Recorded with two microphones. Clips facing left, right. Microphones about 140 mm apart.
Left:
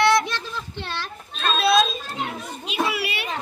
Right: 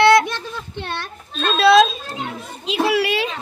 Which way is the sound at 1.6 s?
85° right.